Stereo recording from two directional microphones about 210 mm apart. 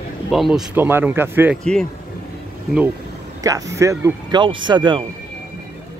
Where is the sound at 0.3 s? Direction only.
Centre (ahead or behind).